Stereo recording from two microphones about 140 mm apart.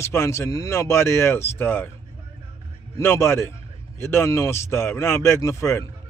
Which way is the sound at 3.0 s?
20° left (ahead or behind).